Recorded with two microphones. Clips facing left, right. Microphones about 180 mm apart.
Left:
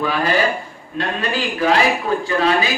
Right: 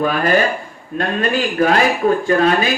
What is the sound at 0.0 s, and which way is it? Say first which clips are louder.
A man's voice: right 3 dB; 50° right (ahead or behind).